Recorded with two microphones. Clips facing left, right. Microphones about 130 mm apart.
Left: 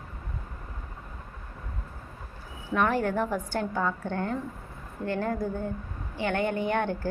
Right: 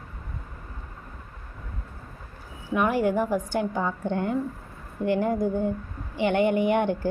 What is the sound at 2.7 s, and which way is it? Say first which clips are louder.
A woman's voice: right 3 dB; 10° right (ahead or behind).